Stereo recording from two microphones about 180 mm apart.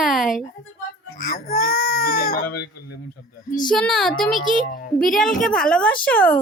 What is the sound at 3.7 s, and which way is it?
A child's voice, 5° left (ahead or behind).